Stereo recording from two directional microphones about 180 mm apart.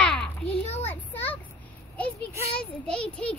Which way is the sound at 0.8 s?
10° left (ahead or behind).